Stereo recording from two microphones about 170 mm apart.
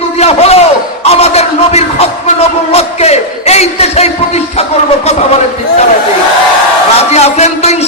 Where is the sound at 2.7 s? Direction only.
40° left (ahead or behind).